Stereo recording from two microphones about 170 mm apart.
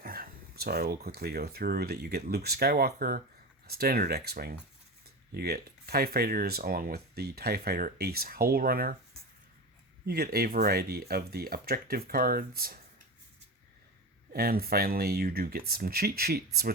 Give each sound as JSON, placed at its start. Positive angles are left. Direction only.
{"t": 0.0, "sound": "speech", "side_deg": -60}
{"t": 10.1, "sound": "speech", "side_deg": -65}
{"t": 14.3, "sound": "speech", "side_deg": -65}